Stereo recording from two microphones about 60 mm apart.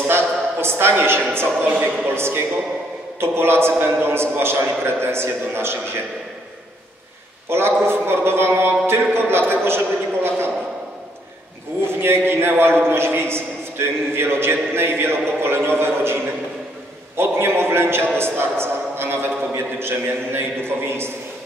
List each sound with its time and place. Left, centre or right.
0.1 s a woman's voice: right
7.4 s a man's voice: right
12.0 s a man's voice: right
17.2 s a man's voice: right